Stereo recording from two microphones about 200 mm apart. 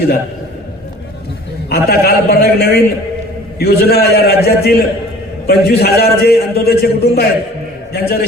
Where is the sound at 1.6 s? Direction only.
50° left (ahead or behind).